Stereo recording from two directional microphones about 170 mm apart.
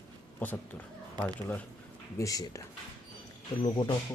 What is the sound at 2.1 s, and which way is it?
Speech, 20° left (ahead or behind).